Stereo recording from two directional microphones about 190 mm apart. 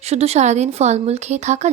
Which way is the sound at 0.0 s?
35° right (ahead or behind).